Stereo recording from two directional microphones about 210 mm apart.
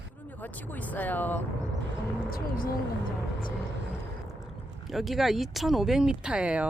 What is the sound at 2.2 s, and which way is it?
Speech, 45° left (ahead or behind).